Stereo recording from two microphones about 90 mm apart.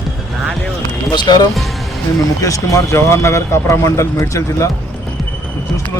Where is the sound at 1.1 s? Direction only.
55° left (ahead or behind).